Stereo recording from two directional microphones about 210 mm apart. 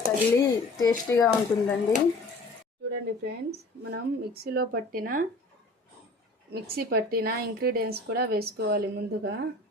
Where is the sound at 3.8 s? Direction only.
50° right (ahead or behind).